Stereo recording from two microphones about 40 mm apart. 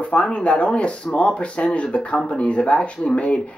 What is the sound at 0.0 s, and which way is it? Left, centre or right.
Speech, left.